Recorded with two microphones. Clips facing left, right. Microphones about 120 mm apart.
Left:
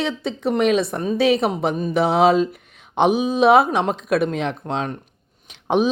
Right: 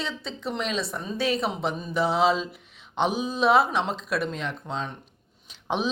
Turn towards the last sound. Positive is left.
turn(degrees=55)  # may be behind; listen again after turning